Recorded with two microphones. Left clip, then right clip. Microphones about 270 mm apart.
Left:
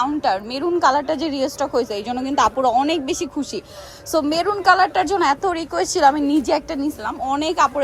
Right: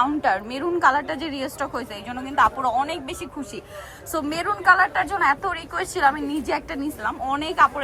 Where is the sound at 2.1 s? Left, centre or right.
Left.